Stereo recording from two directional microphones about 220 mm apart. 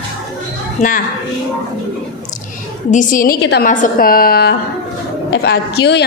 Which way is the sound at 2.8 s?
35° left (ahead or behind).